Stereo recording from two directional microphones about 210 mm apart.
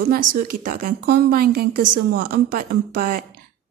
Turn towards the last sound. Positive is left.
turn(degrees=-45)  # may be behind; listen again after turning